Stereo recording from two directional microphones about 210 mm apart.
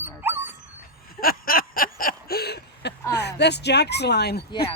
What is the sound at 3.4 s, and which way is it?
Speech, 55° left (ahead or behind).